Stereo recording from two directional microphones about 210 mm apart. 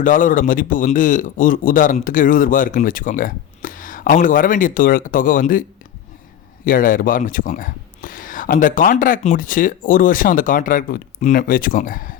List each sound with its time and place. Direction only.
0.0 s a man's voice: 40° left (ahead or behind)
6.7 s a man's voice: 40° left (ahead or behind)